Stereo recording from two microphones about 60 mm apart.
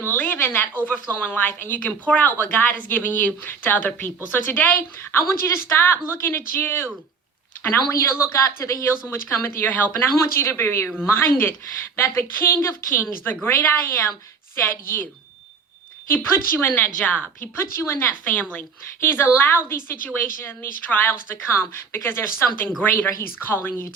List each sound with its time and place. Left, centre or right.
0.1 s a sound: left
0.3 s a woman's voice: left
0.7 s speech: left
4.8 s a woman's voice: left
7.9 s speech: left
9.3 s speech: left
9.7 s a woman's voice: left
10.2 s a woman's voice: left
11.9 s a woman's voice: left
16.0 s a woman's voice: left
17.6 s a woman's voice: left
18.1 s a woman's voice: left